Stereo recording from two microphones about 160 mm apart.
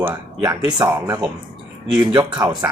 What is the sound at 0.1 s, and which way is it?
Speech, 25° right (ahead or behind).